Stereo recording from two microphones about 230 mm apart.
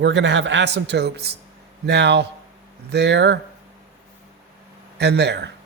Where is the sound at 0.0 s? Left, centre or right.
Right.